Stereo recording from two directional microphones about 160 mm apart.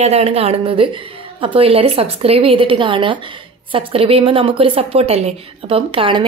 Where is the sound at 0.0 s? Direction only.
40° right (ahead or behind).